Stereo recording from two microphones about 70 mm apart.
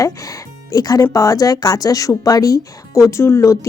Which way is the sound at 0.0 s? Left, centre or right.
Left.